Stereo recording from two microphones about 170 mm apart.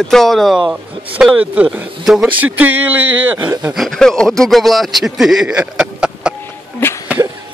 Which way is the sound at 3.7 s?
Centre (ahead or behind).